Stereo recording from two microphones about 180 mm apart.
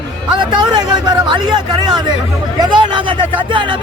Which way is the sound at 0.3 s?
25° right (ahead or behind).